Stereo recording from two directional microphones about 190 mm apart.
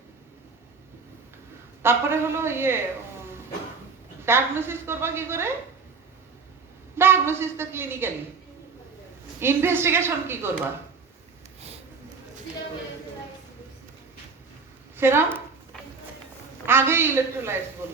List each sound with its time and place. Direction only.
1.8 s a woman's voice: 10° right (ahead or behind)
4.3 s a woman's voice: 10° right (ahead or behind)
6.9 s a woman's voice: 10° right (ahead or behind)
9.4 s a woman's voice: 15° right (ahead or behind)
14.9 s speech: 10° right (ahead or behind)
16.6 s a woman's voice: 10° right (ahead or behind)